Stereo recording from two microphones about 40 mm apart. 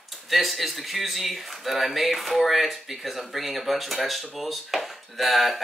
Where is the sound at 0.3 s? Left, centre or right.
Centre.